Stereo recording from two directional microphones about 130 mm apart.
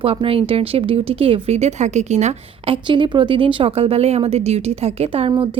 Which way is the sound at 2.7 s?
40° right (ahead or behind).